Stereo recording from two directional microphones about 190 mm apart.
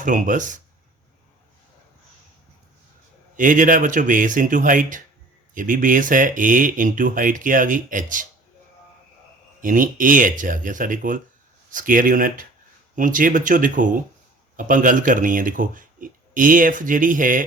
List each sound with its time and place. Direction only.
0.0 s speech: 45° right (ahead or behind)
3.3 s speech: 45° right (ahead or behind)
9.6 s speech: 45° right (ahead or behind)